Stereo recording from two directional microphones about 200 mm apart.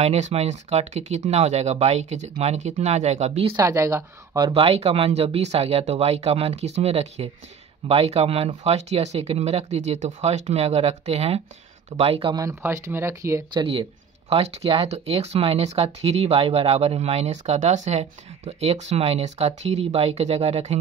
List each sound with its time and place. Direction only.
0.0 s speech: 35° right (ahead or behind)
3.5 s speech: 15° right (ahead or behind)
4.6 s speech: 30° right (ahead or behind)